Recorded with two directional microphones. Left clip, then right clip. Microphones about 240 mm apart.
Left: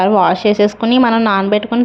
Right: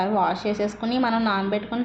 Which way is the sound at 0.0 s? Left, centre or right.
Left.